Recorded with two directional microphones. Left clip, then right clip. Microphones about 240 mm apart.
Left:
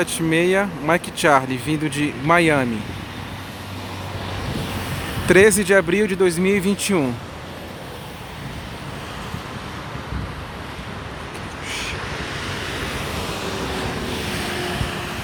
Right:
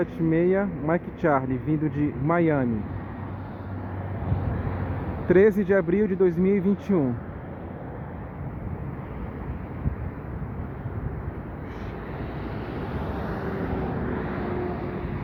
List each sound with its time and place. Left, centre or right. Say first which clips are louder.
0.0 s speech: left 5 dB; centre
5.3 s speech: left 6 dB; left
12.4 s waves: left 8 dB; right